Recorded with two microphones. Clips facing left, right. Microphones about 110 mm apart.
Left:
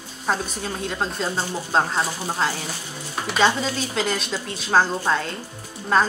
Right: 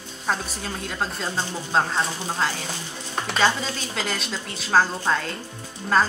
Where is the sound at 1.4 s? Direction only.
10° left (ahead or behind).